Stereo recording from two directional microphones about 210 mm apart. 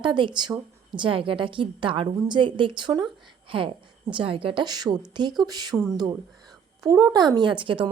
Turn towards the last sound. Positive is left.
turn(degrees=-25)  # may be behind; listen again after turning